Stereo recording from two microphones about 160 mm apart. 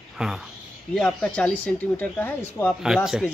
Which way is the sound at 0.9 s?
10° left (ahead or behind).